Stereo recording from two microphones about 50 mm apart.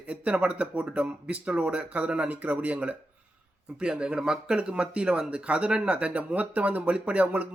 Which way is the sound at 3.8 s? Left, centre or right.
Centre.